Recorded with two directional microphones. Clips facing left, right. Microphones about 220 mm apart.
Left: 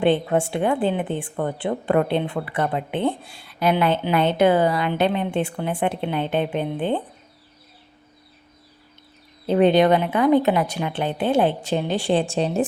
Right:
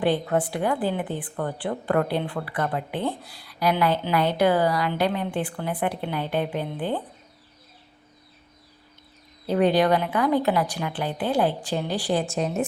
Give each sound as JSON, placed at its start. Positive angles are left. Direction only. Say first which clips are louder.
{"t": 0.0, "sound": "a woman's voice", "louder": "left 4 dB", "side_deg": 25}
{"t": 9.5, "sound": "a woman's voice", "louder": "left 4 dB", "side_deg": 25}